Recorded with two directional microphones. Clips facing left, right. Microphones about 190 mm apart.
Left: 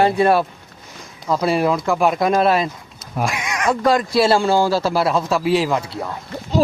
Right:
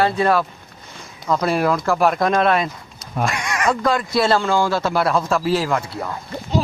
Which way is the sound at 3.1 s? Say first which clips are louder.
Even; centre (ahead or behind).